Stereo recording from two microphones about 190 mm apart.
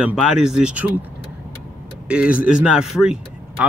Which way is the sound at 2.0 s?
5° right (ahead or behind).